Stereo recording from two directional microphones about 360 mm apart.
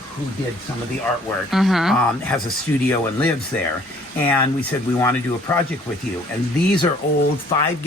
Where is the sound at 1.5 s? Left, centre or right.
Centre.